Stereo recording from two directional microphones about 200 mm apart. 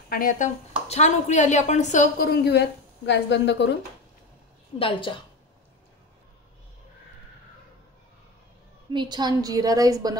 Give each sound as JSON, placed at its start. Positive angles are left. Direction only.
{"t": 0.1, "sound": "a woman's voice", "side_deg": 45}
{"t": 4.7, "sound": "a woman's voice", "side_deg": 25}
{"t": 8.9, "sound": "a woman's voice", "side_deg": -20}